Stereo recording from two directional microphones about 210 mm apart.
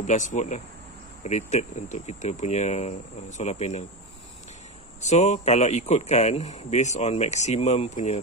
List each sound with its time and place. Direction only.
0.0 s speech: 35° left (ahead or behind)
5.0 s speech: 35° left (ahead or behind)